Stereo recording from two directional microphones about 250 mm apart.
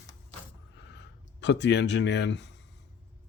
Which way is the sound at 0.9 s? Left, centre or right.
Left.